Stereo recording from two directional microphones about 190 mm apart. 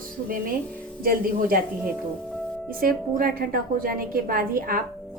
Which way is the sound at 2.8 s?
50° right (ahead or behind).